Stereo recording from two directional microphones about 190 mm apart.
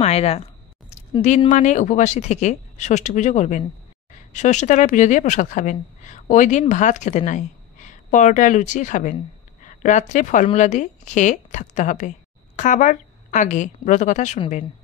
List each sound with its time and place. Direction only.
0.0 s speech: 35° left (ahead or behind)
0.8 s a sound: 35° left (ahead or behind)
1.5 s a woman's voice: 40° left (ahead or behind)